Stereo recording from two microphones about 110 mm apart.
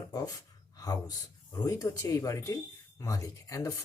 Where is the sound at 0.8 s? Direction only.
35° left (ahead or behind).